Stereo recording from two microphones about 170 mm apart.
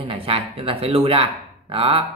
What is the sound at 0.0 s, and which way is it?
Speech, 35° right (ahead or behind).